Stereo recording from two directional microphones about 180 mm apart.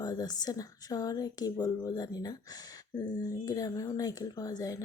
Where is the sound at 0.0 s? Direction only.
20° left (ahead or behind).